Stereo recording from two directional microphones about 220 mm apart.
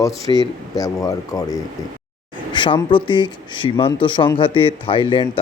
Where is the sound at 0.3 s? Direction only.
15° left (ahead or behind).